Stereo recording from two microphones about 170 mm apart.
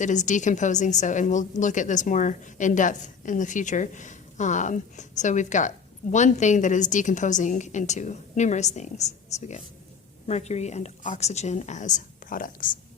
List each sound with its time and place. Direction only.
0.0 s a woman's voice: 45° left (ahead or behind)